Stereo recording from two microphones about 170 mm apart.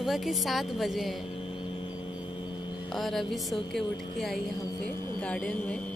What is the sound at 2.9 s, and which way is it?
A woman's voice, centre (ahead or behind).